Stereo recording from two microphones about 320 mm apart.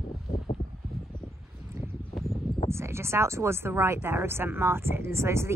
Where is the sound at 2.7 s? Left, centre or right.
Centre.